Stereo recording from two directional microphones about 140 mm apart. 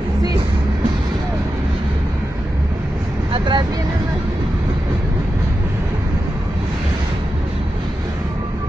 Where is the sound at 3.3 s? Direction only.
35° right (ahead or behind).